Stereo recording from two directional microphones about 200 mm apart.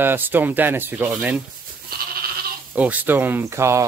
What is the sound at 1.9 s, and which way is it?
Goat, 50° right (ahead or behind).